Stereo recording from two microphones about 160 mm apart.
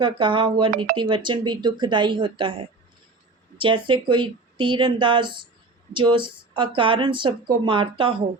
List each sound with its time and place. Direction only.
0.0 s speech: 30° right (ahead or behind)
3.6 s speech: 30° right (ahead or behind)